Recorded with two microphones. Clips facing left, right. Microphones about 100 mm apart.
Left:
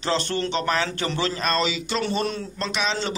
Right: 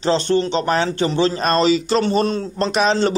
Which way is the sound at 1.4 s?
40° right (ahead or behind).